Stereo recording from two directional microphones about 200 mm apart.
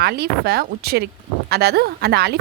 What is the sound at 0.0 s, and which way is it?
A woman's voice, 55° right (ahead or behind).